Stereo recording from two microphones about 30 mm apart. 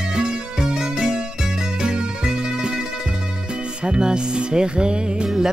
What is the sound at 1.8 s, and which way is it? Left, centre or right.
Music, right.